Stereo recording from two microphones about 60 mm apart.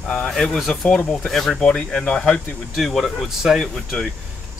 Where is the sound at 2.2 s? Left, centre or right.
Centre.